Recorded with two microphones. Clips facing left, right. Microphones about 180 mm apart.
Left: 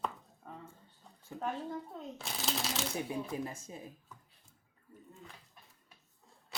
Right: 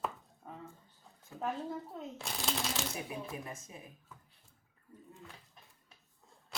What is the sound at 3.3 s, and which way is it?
Speech, 30° left (ahead or behind).